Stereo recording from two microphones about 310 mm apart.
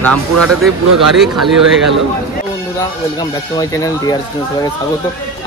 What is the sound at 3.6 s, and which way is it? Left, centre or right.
Speech, centre.